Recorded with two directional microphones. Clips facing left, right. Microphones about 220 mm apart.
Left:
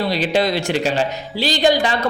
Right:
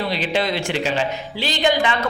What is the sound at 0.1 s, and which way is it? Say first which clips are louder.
A woman's voice: left 4 dB; 40° left (ahead or behind).